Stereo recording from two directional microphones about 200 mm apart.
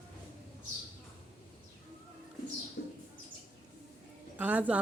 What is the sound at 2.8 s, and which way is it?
Bird, 55° left (ahead or behind).